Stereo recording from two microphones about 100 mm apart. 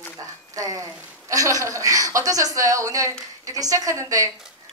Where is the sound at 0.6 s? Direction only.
35° right (ahead or behind).